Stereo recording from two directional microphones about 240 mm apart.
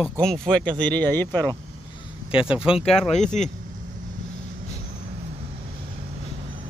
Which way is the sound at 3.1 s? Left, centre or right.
Left.